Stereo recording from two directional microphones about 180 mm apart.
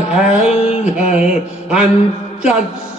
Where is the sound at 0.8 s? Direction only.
40° left (ahead or behind).